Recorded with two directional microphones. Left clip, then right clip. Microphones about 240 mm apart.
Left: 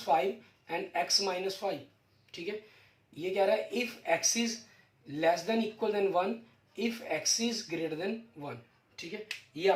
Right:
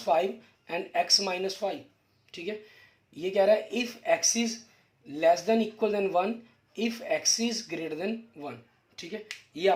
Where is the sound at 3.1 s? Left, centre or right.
Right.